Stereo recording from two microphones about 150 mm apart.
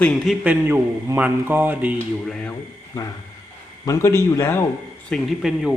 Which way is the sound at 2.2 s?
5° left (ahead or behind).